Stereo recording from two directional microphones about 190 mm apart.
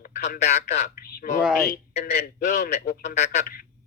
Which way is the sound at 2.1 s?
55° left (ahead or behind).